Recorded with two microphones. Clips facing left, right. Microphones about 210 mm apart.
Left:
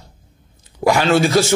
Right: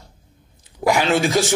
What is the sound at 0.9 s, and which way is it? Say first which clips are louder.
Speech: left 3 dB; 15° right (ahead or behind).